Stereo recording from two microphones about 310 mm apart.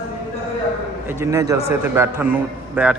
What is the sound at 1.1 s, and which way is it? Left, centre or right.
A man's voice, centre.